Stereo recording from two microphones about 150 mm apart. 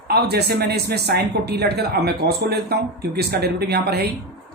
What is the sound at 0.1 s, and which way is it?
Speech, 90° right.